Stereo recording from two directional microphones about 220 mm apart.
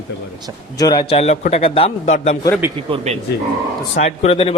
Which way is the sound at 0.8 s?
20° left (ahead or behind).